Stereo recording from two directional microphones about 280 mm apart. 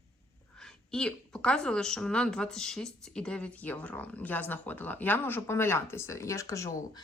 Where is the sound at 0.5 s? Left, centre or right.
Centre.